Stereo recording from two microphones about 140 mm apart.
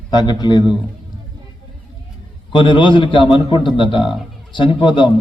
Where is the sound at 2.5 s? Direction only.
35° left (ahead or behind).